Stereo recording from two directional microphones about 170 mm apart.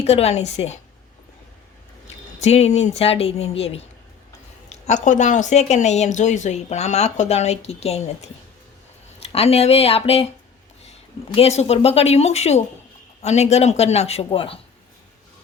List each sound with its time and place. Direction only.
0.0 s speech: 40° left (ahead or behind)
2.4 s speech: 40° left (ahead or behind)
4.9 s speech: 45° left (ahead or behind)
9.2 s speech: 35° left (ahead or behind)